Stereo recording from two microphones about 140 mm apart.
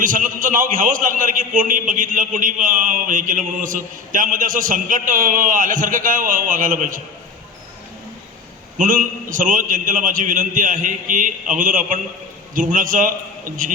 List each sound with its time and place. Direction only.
0.0 s a man's voice: 70° right (ahead or behind)
8.8 s a man's voice: 70° right (ahead or behind)